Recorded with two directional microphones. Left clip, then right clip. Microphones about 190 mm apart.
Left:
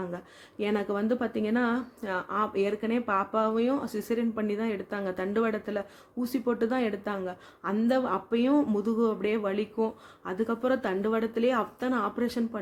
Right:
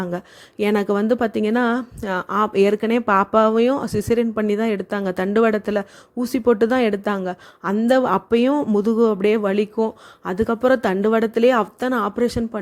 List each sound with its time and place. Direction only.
0.6 s speech: 45° right (ahead or behind)